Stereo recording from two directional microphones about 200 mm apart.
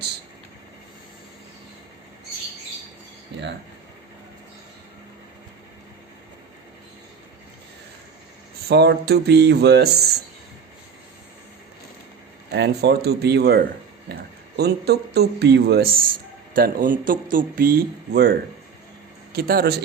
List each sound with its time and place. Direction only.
8.7 s speech: 55° right (ahead or behind)
12.5 s a man's voice: 55° right (ahead or behind)